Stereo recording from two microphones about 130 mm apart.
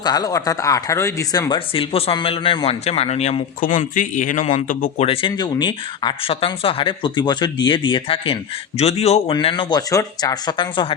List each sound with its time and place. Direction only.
0.0 s speech: 30° left (ahead or behind)
1.5 s a man's voice: 45° left (ahead or behind); by 4.4 s 85° left
4.9 s speech: 45° left (ahead or behind)
8.8 s a man's voice: 55° left (ahead or behind)
9.3 s speech: 40° left (ahead or behind)